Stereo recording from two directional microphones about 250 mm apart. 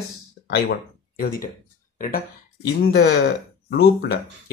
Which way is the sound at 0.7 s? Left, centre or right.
Left.